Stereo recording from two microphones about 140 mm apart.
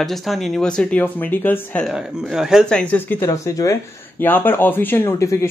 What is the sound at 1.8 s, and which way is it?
Speech, 5° right (ahead or behind).